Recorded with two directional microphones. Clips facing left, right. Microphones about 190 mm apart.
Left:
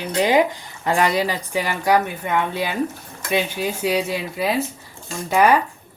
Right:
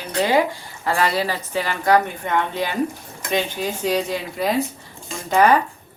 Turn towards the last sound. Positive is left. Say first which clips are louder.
# even
turn(degrees=10)  # may be behind; listen again after turning